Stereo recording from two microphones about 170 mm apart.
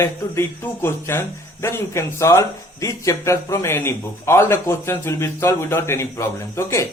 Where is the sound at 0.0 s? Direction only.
15° left (ahead or behind).